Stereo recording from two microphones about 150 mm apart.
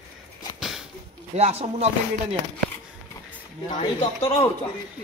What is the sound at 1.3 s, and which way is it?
Speech, 45° right (ahead or behind).